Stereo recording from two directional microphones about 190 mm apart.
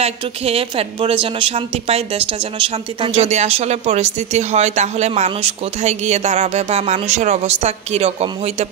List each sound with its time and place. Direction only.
0.0 s speech: 30° right (ahead or behind)